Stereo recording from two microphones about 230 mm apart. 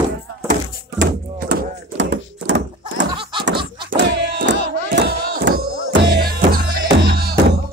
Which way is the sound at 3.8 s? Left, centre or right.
Right.